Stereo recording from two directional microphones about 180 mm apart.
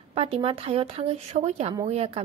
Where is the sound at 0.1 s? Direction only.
35° right (ahead or behind).